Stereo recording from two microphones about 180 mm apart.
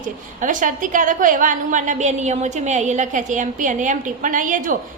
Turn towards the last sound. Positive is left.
turn(degrees=-45)  # may be behind; listen again after turning